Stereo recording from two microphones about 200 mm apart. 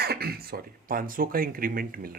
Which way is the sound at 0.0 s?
50° right (ahead or behind).